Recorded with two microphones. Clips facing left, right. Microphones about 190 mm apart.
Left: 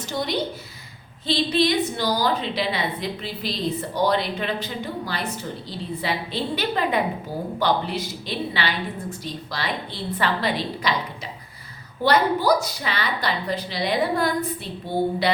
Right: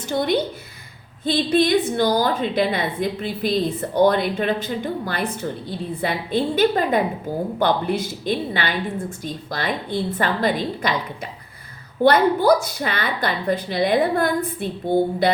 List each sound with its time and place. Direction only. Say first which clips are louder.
0.1 s a woman's voice: right 5 dB; 55° right (ahead or behind)
12.0 s a woman's voice: right 4 dB; 55° right (ahead or behind)